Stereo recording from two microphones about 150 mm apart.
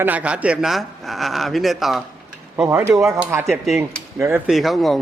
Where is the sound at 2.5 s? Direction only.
10° right (ahead or behind).